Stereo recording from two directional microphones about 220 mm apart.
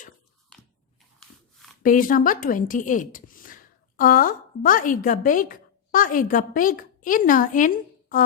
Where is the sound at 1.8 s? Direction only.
40° left (ahead or behind).